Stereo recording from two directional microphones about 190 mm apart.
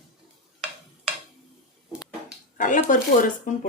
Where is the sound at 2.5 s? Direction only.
45° left (ahead or behind).